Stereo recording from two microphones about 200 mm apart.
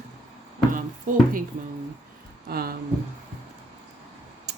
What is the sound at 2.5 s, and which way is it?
Speech, 50° right (ahead or behind).